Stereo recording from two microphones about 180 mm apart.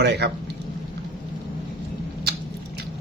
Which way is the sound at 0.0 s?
70° right (ahead or behind).